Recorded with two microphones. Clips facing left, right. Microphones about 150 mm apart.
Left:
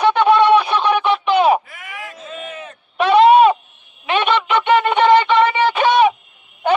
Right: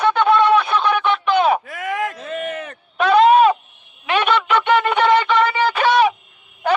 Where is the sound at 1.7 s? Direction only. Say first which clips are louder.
Right 11 dB; 90° right; by 2.8 s 60° right (ahead or behind).